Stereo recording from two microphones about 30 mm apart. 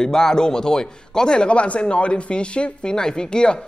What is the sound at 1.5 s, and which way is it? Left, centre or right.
Speech, left.